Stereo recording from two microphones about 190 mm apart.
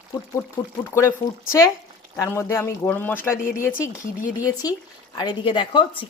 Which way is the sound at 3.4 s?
45° left (ahead or behind).